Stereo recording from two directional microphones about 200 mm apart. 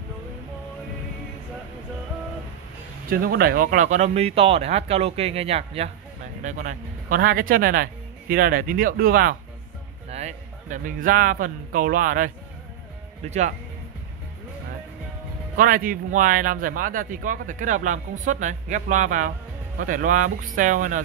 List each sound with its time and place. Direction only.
3.1 s speech: 50° right (ahead or behind)
10.0 s a man's voice: 35° right (ahead or behind)
15.5 s speech: 45° right (ahead or behind)